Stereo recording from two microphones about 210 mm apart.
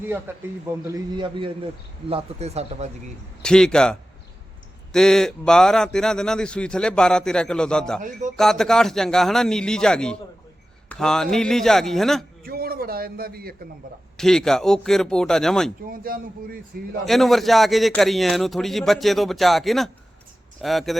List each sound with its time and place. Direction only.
0.3 s a man's voice: 10° right (ahead or behind); by 2.9 s 30° right (ahead or behind)
3.4 s speech: 5° left (ahead or behind)
12.5 s a man's voice: 45° right (ahead or behind)
14.2 s speech: centre (ahead or behind)
15.9 s a man's voice: 45° right (ahead or behind)
17.1 s speech: centre (ahead or behind)